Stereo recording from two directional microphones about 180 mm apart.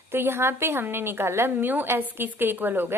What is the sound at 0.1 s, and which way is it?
A woman's voice, 15° right (ahead or behind).